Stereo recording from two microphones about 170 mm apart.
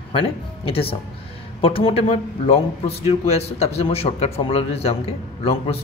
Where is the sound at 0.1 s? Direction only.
35° left (ahead or behind).